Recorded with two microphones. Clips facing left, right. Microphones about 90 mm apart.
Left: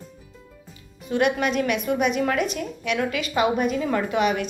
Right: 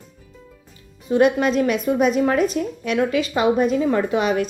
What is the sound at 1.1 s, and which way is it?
A woman's voice, 30° right (ahead or behind).